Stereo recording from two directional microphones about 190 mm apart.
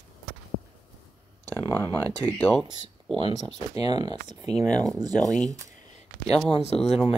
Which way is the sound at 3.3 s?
35° left (ahead or behind).